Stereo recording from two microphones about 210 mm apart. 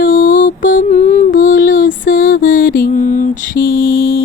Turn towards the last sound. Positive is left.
turn(degrees=45)  # may be behind; listen again after turning